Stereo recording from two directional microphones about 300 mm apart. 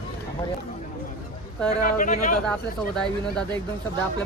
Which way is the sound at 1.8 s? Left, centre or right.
Left.